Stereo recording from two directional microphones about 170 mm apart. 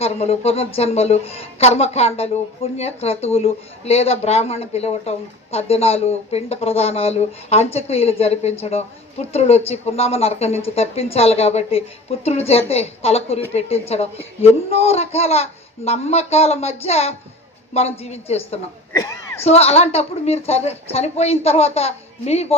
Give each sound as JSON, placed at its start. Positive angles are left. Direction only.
{"t": 0.0, "sound": "a woman's voice", "side_deg": 35}
{"t": 18.9, "sound": "speech", "side_deg": 20}
{"t": 19.5, "sound": "a woman's voice", "side_deg": 35}